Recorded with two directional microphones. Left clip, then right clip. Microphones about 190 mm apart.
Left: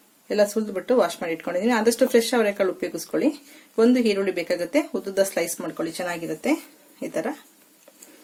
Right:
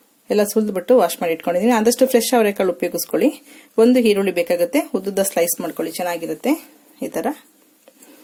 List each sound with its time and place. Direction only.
0.3 s speech: 40° right (ahead or behind)